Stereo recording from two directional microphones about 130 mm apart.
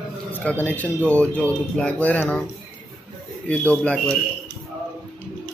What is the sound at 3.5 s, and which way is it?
Speech, 10° left (ahead or behind).